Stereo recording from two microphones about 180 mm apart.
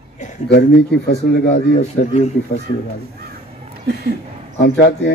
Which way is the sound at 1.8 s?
40° left (ahead or behind).